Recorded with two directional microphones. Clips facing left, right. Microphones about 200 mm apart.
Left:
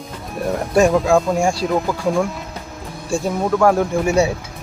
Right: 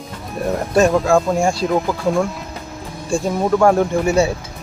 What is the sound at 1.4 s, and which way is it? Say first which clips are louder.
Speech: even; 10° left (ahead or behind).